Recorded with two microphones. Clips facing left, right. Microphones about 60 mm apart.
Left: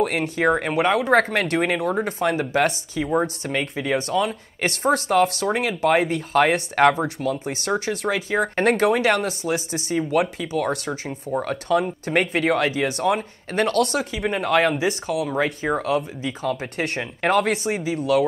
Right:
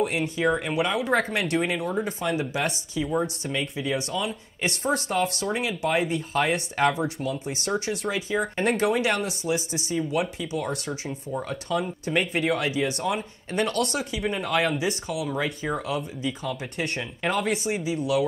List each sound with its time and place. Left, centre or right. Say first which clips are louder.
0.0 s speech: left 3 dB; left
14.5 s speech: left 6 dB; left
14.9 s speech: left 5 dB; left
17.8 s speech: left 5 dB; left